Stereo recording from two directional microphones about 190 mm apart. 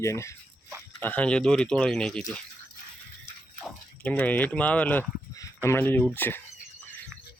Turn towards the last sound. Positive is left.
turn(degrees=10)  # may be behind; listen again after turning